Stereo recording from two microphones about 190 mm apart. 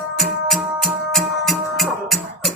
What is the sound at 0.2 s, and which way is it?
Music, centre (ahead or behind).